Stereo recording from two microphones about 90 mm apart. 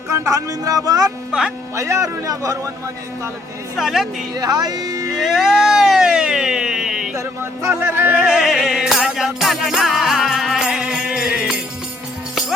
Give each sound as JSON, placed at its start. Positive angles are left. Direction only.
{"t": 0.1, "sound": "speech", "side_deg": -40}
{"t": 1.3, "sound": "speech", "side_deg": -10}
{"t": 1.7, "sound": "speech", "side_deg": -35}
{"t": 3.8, "sound": "speech", "side_deg": -5}
{"t": 4.4, "sound": "speech", "side_deg": -45}
{"t": 5.1, "sound": "a sound", "side_deg": 0}
{"t": 7.8, "sound": "yodeling", "side_deg": -25}
{"t": 8.1, "sound": "music", "side_deg": -5}